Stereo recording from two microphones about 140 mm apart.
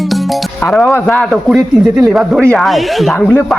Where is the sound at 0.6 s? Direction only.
10° left (ahead or behind).